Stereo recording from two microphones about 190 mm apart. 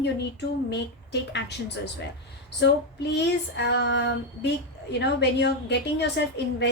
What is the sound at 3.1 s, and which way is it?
Female singing, 65° left (ahead or behind).